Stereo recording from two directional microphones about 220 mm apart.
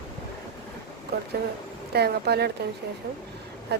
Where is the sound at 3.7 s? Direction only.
50° right (ahead or behind).